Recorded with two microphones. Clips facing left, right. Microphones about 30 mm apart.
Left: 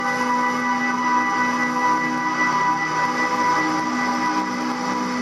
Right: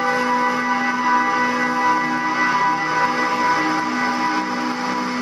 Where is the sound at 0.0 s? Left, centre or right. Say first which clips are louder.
Right 2 dB; right.